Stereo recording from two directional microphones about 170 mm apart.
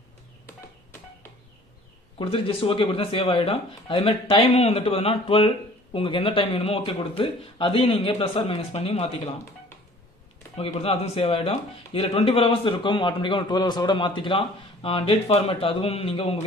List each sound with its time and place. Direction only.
2.1 s speech: 30° left (ahead or behind)
10.8 s speech: 35° left (ahead or behind)